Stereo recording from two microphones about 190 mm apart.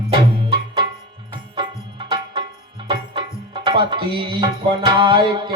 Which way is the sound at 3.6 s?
25° right (ahead or behind).